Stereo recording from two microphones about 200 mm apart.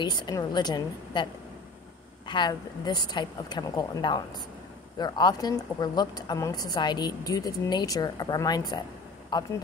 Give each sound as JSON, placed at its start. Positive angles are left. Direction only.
{"t": 0.0, "sound": "a woman's voice", "side_deg": 20}